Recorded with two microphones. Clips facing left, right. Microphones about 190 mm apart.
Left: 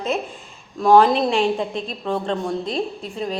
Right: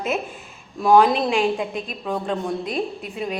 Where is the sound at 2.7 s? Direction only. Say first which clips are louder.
Left 1 dB; 25° left (ahead or behind).